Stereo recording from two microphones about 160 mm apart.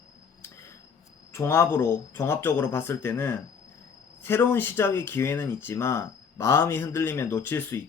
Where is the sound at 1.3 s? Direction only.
15° left (ahead or behind).